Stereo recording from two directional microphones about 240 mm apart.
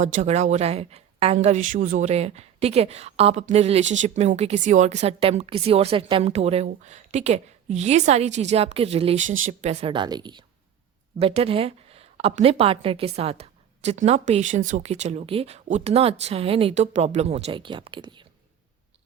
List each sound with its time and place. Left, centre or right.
0.0 s speech: right